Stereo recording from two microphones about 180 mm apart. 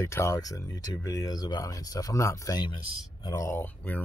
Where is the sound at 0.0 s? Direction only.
15° left (ahead or behind).